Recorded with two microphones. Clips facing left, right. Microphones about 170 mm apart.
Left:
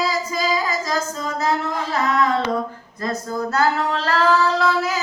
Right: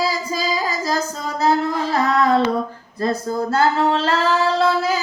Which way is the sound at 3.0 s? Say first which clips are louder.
Right 4 dB; 30° right (ahead or behind).